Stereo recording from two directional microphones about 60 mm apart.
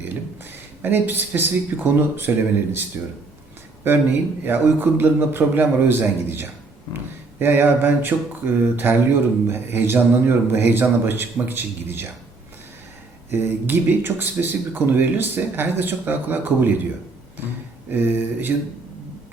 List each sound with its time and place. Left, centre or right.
0.8 s mantra: right
3.8 s mantra: right
13.3 s mantra: right
17.9 s mantra: right